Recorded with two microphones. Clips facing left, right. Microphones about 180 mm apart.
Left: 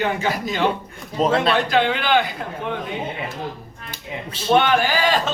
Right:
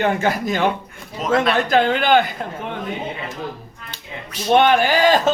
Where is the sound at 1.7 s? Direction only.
45° right (ahead or behind).